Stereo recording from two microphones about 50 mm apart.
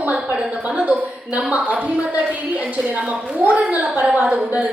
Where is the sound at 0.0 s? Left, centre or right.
Right.